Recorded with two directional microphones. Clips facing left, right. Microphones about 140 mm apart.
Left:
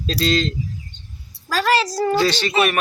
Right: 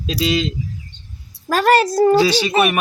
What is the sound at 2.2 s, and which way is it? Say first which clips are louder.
Speech: right 3 dB; 10° right (ahead or behind).